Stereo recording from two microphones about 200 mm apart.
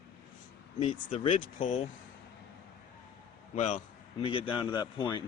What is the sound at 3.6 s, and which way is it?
A man's voice, 35° left (ahead or behind).